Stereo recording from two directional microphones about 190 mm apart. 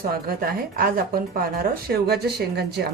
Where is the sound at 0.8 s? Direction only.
50° right (ahead or behind).